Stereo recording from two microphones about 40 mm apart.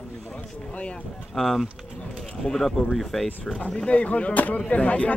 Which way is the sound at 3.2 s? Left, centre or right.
Centre.